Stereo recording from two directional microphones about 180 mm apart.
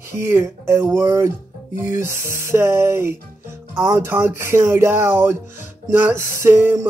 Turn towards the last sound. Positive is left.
turn(degrees=-15)  # may be behind; listen again after turning